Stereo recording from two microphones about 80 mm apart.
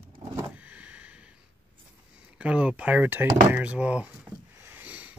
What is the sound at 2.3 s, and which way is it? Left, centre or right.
Speech, centre.